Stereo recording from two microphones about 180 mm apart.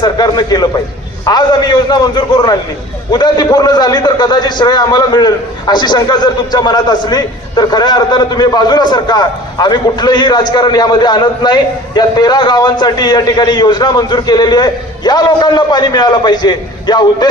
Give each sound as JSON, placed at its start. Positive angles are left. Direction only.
{"t": 0.0, "sound": "a man's voice", "side_deg": 25}